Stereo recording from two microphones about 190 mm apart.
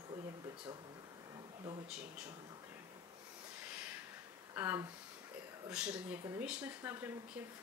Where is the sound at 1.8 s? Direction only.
5° right (ahead or behind).